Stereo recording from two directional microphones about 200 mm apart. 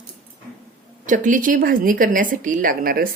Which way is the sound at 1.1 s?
40° right (ahead or behind).